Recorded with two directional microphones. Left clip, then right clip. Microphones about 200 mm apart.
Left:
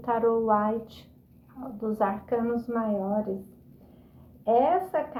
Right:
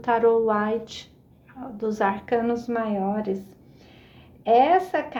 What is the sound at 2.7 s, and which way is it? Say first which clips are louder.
Speech: right 3 dB; 45° right (ahead or behind).